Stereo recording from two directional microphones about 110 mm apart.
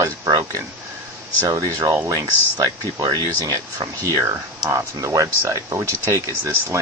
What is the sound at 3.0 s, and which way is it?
Speech, 35° right (ahead or behind).